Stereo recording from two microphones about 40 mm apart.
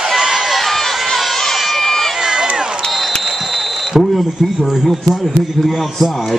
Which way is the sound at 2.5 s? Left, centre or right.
Centre.